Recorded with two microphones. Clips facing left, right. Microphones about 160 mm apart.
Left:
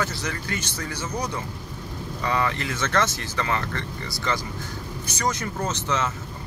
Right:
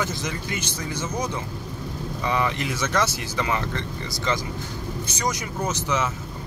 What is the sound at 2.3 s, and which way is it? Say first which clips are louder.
Speech: right 1 dB; 15° right (ahead or behind).